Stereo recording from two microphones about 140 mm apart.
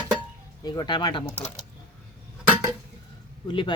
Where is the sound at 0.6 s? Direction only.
30° left (ahead or behind).